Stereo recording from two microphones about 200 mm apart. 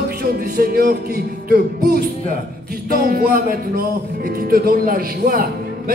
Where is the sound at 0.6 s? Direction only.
50° right (ahead or behind).